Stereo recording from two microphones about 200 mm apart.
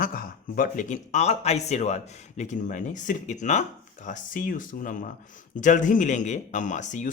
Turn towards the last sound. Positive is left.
turn(degrees=40)  # may be behind; listen again after turning